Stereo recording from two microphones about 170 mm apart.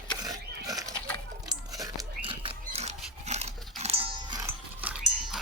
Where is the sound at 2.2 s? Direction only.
35° right (ahead or behind).